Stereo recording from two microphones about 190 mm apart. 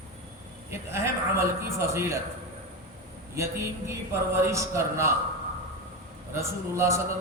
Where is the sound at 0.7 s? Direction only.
15° right (ahead or behind).